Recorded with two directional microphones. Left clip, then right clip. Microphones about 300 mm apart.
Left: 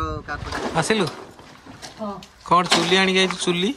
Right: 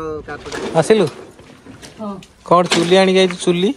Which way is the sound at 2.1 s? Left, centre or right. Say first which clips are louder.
Right 5 dB; centre.